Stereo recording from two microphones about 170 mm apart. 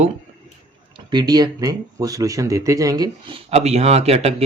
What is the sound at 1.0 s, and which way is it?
Speech, 25° right (ahead or behind).